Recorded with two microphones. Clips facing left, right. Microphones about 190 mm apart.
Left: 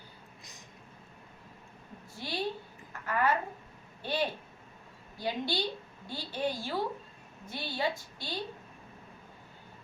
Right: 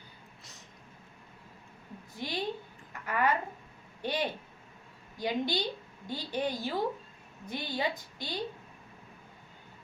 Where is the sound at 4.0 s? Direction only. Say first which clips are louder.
Even; 15° right (ahead or behind).